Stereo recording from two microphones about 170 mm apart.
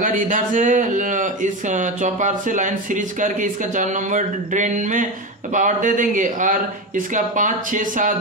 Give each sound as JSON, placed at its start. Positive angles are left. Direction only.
{"t": 0.0, "sound": "speech", "side_deg": -50}